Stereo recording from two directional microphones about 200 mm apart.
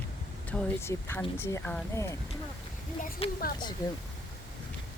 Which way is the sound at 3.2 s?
30° left (ahead or behind).